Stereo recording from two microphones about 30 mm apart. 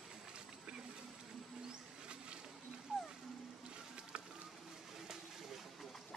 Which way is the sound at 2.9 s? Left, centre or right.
Right.